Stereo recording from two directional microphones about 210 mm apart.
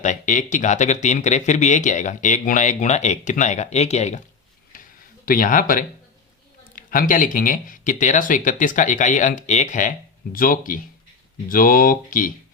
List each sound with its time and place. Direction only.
0.0 s speech: 35° left (ahead or behind)
4.7 s a sound: 40° left (ahead or behind)
5.2 s speech: 40° left (ahead or behind)